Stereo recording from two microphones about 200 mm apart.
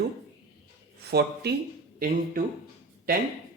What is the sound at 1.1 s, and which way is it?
Speech, 55° right (ahead or behind).